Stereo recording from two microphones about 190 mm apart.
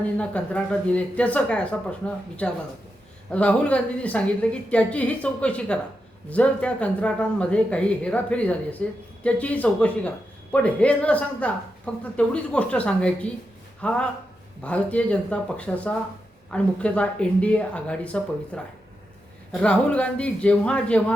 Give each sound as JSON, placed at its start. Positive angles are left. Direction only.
{"t": 0.0, "sound": "a woman's voice", "side_deg": 5}